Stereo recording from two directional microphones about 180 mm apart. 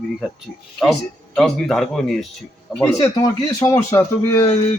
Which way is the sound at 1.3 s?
5° left (ahead or behind).